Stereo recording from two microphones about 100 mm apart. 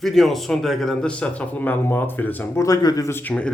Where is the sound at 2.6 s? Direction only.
35° left (ahead or behind).